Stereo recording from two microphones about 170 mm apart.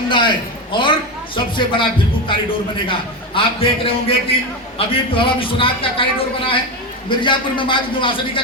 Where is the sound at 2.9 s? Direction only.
30° left (ahead or behind).